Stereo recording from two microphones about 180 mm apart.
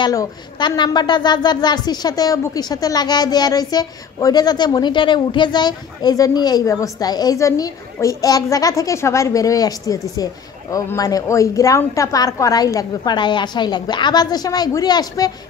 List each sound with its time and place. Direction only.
0.0 s a woman's voice: 20° left (ahead or behind)